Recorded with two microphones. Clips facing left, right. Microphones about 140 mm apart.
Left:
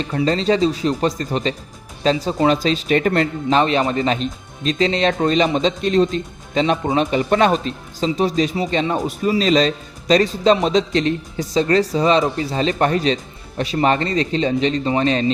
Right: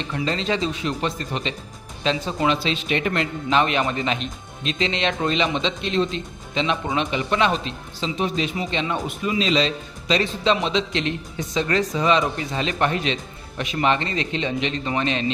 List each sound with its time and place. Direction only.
0.0 s speech: 40° left (ahead or behind)